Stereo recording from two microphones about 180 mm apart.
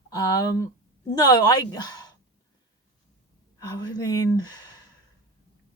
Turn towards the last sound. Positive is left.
turn(degrees=20)  # may be behind; listen again after turning